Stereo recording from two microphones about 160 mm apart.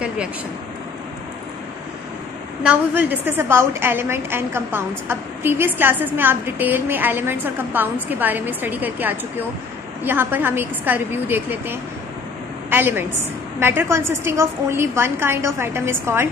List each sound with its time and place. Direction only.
2.6 s a woman's voice: 10° right (ahead or behind)